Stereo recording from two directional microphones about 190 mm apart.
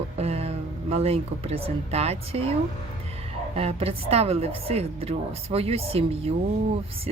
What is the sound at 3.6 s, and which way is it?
Speech, 30° right (ahead or behind).